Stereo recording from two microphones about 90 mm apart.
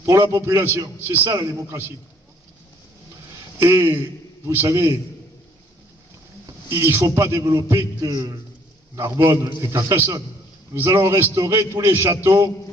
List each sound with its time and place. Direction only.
0.3 s a man's voice: 35° right (ahead or behind)
3.6 s a man's voice: 25° right (ahead or behind)
6.7 s a man's voice: 30° right (ahead or behind)